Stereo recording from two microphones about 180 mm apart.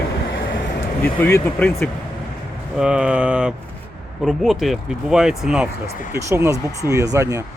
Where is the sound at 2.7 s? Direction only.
5° right (ahead or behind).